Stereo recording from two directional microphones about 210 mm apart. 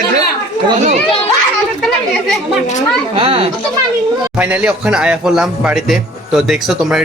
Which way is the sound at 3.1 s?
25° right (ahead or behind).